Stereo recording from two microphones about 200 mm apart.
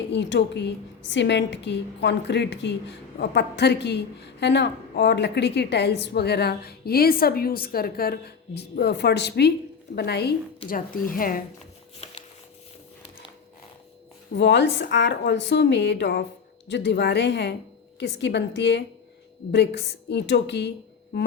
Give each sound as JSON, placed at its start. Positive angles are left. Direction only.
{"t": 0.1, "sound": "a woman's voice", "side_deg": 60}
{"t": 10.7, "sound": "speech", "side_deg": 45}
{"t": 14.3, "sound": "a woman's voice", "side_deg": 60}